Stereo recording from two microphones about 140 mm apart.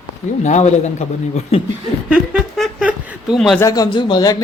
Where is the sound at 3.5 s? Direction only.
25° left (ahead or behind).